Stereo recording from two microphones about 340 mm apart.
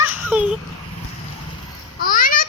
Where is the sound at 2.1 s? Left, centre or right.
Left.